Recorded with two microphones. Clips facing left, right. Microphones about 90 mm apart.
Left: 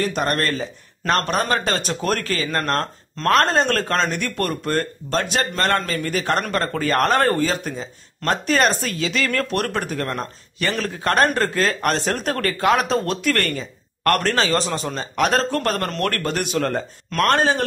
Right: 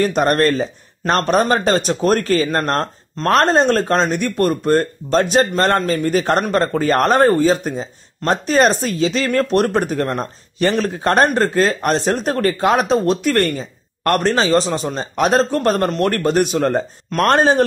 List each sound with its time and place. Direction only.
0.0 s a man's voice: 35° right (ahead or behind)